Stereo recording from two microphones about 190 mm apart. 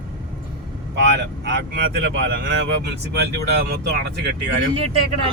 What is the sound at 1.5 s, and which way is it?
Speech, 70° right (ahead or behind).